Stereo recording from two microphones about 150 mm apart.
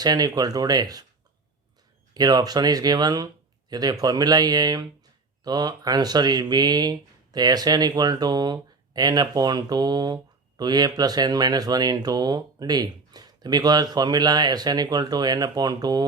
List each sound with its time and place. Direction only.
0.0 s speech: 25° right (ahead or behind)
2.1 s speech: 25° right (ahead or behind)